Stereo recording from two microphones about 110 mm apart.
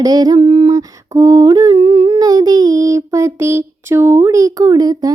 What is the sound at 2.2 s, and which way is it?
Child singing, 35° right (ahead or behind).